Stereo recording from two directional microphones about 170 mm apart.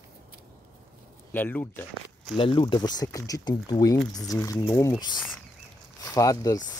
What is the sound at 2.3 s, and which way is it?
Speech, 30° left (ahead or behind).